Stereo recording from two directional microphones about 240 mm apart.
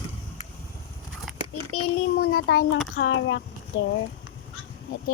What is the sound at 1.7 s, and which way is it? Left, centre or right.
Speech, left.